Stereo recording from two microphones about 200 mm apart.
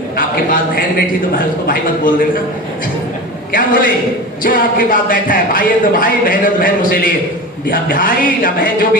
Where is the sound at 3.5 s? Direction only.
45° left (ahead or behind).